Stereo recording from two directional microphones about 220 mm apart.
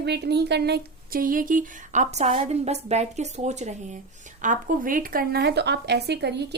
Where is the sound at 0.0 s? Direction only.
50° right (ahead or behind).